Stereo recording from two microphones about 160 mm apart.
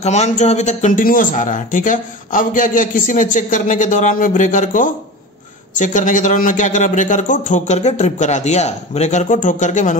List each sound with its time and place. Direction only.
0.0 s speech: 45° left (ahead or behind)